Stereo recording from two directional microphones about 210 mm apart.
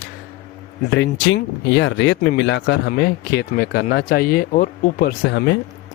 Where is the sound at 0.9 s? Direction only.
55° left (ahead or behind).